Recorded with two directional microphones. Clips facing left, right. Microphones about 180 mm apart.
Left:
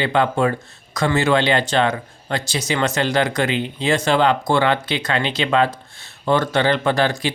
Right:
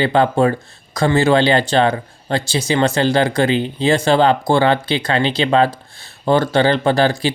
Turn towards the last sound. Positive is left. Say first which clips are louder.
# right 4 dB
turn(degrees=-30)  # may be behind; listen again after turning